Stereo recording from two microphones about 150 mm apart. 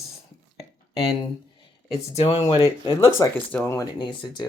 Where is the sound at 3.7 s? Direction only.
30° left (ahead or behind).